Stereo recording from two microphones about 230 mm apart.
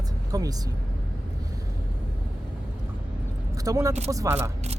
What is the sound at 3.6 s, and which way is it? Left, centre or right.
Speech, centre.